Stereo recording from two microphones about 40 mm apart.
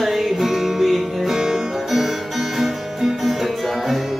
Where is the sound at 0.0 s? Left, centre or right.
Centre.